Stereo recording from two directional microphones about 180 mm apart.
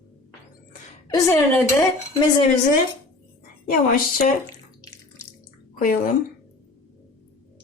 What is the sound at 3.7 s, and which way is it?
Speech, 50° left (ahead or behind).